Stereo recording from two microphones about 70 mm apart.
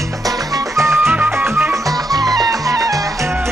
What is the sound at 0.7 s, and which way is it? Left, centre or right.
Music, right.